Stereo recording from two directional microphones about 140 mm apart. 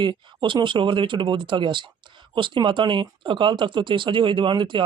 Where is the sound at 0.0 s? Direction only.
35° right (ahead or behind).